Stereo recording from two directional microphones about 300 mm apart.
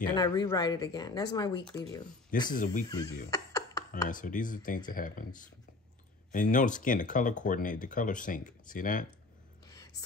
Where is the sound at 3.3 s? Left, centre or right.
Centre.